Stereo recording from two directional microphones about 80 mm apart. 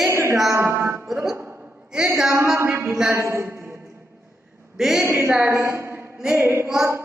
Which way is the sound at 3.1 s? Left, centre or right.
Right.